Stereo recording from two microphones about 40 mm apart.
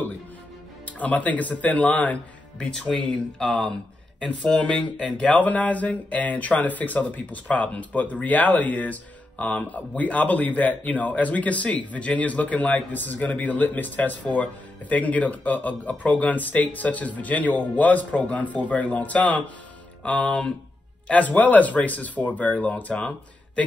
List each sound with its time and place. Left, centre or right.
0.8 s speech: left
3.1 s speech: centre
4.2 s speech: left
21.1 s speech: left